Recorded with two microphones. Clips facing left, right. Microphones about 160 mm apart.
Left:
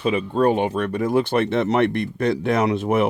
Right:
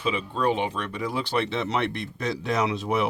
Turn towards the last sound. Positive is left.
turn(degrees=50)  # may be behind; listen again after turning